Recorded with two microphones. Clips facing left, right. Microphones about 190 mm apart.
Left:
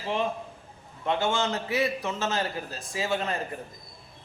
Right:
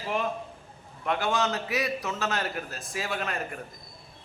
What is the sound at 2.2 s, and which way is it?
Speech, 25° left (ahead or behind).